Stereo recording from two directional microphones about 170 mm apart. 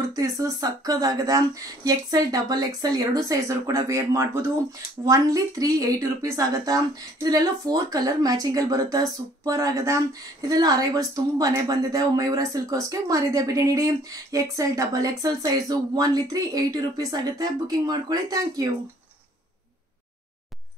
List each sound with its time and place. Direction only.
0.1 s speech: 20° right (ahead or behind)